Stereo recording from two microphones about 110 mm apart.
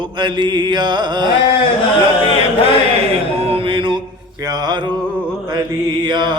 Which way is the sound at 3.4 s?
60° right (ahead or behind).